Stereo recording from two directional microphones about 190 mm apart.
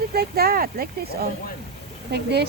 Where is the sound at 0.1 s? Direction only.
55° right (ahead or behind).